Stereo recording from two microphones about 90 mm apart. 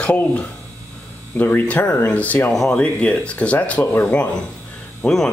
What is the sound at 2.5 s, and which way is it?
Speech, 5° left (ahead or behind).